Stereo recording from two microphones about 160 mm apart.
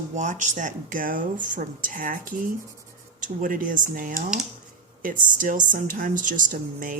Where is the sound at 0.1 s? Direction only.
50° right (ahead or behind).